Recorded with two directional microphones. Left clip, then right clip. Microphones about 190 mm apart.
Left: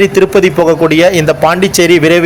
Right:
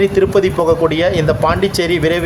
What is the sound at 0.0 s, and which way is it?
A man's voice, 20° left (ahead or behind).